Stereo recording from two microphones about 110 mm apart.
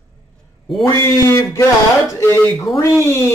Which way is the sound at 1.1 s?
25° left (ahead or behind).